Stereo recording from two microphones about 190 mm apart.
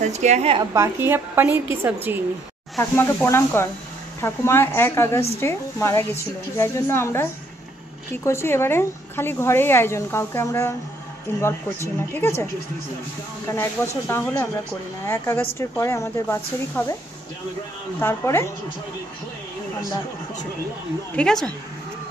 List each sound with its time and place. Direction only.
0.0 s a woman's voice: 35° right (ahead or behind)
0.7 s a woman's voice: 15° right (ahead or behind)
2.8 s a woman's voice: 10° left (ahead or behind)
13.5 s a woman's voice: 15° left (ahead or behind)
17.9 s a woman's voice: 10° left (ahead or behind)
21.2 s speech: 5° left (ahead or behind)